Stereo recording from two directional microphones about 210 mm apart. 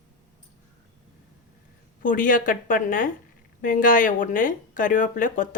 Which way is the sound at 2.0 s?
40° left (ahead or behind).